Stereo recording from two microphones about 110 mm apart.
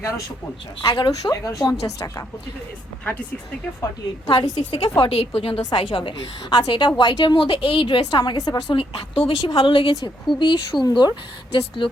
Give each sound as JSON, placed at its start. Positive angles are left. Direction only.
{"t": 0.9, "sound": "a woman's voice", "side_deg": 35}
{"t": 3.0, "sound": "speech", "side_deg": 15}
{"t": 4.3, "sound": "a woman's voice", "side_deg": 40}
{"t": 4.8, "sound": "a woman's voice", "side_deg": 60}
{"t": 8.4, "sound": "speech", "side_deg": 35}
{"t": 8.7, "sound": "a woman's voice", "side_deg": 55}